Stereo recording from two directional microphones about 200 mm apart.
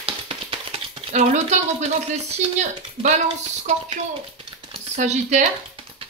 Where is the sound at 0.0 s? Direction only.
30° right (ahead or behind).